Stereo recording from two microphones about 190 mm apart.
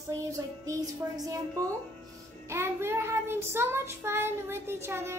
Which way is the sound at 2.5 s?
15° right (ahead or behind).